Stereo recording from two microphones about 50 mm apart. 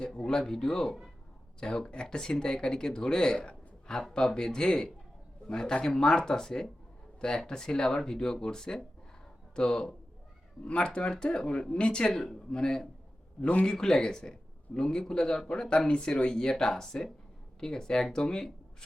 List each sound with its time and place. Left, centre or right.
0.3 s speech: centre
13.4 s speech: left
13.7 s speech: centre